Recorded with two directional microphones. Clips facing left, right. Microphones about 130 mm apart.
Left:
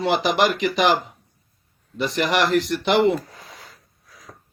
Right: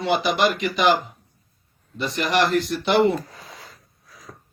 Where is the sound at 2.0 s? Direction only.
90° left.